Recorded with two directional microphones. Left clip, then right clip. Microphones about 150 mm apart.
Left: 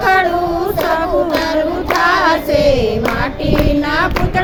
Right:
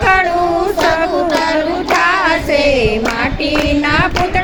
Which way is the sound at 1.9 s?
10° left (ahead or behind).